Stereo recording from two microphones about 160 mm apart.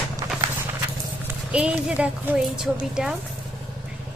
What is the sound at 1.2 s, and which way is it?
A woman's voice, 10° right (ahead or behind).